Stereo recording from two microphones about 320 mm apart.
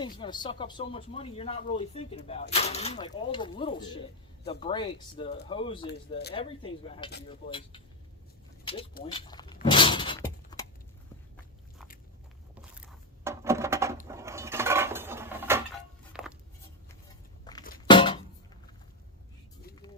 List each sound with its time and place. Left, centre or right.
0.2 s speech: centre
5.9 s speech: left
6.3 s speech: centre
9.6 s shatter: centre
12.7 s a sound: centre
14.1 s dishes: centre
16.1 s a sound: centre
17.5 s music: centre
17.8 s a sound: centre